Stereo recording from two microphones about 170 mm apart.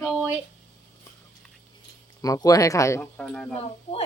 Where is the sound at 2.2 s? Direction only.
20° left (ahead or behind).